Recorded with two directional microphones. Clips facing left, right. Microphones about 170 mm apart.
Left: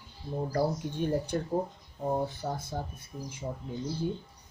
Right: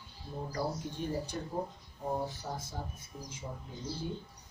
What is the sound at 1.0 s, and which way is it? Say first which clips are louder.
Speech: left 7 dB; 60° left (ahead or behind).